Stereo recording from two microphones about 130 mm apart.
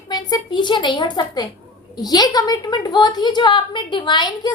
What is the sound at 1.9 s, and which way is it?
A woman's voice, 30° left (ahead or behind).